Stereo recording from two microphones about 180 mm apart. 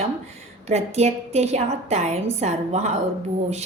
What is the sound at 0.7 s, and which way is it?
A woman's voice, 35° right (ahead or behind).